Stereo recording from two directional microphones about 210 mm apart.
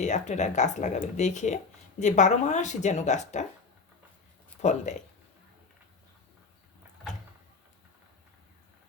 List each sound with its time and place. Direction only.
0.0 s speech: 35° left (ahead or behind)
4.6 s speech: 35° left (ahead or behind)